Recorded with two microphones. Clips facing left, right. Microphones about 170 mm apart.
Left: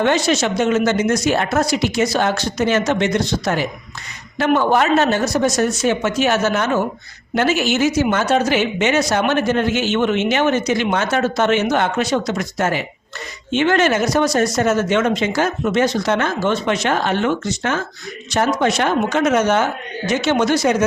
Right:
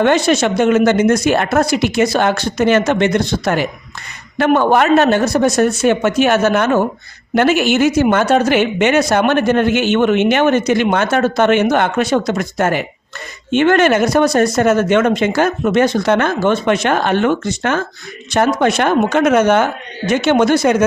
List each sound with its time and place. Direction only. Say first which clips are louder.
0.0 s speech: right 4 dB; 55° right (ahead or behind)